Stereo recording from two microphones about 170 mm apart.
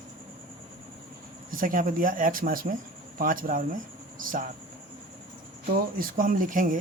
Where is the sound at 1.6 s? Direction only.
55° right (ahead or behind).